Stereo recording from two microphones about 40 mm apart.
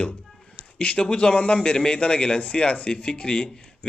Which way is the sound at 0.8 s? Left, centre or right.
Left.